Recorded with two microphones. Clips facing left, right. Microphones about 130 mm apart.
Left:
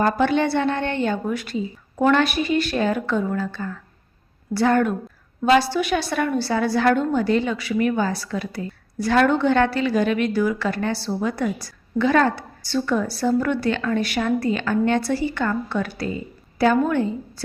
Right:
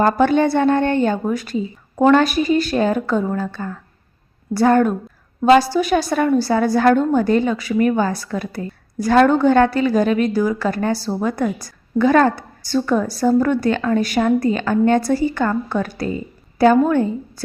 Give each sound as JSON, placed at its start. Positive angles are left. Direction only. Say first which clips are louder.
{"t": 0.0, "sound": "a woman's voice", "louder": "right 4 dB", "side_deg": -40}